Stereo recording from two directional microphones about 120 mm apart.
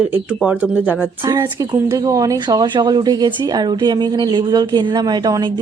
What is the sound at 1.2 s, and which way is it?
Speech, 25° right (ahead or behind).